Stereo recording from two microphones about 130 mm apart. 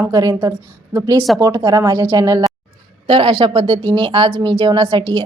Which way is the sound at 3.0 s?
45° right (ahead or behind).